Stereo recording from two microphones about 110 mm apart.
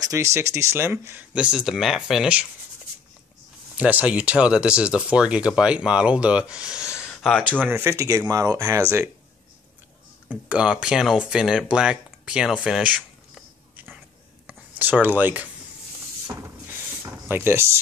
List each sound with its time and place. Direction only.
0.0 s speech: 25° right (ahead or behind)
1.3 s speech: 5° right (ahead or behind)
3.7 s speech: 10° right (ahead or behind)
7.4 s speech: 15° right (ahead or behind)
10.2 s speech: 10° right (ahead or behind)
13.7 s a sound: 15° right (ahead or behind)
14.5 s speech: 15° right (ahead or behind)
17.0 s a sound: 20° right (ahead or behind)